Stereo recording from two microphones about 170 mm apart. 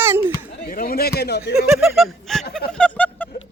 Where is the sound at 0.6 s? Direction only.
60° left (ahead or behind); by 1.5 s 80° left.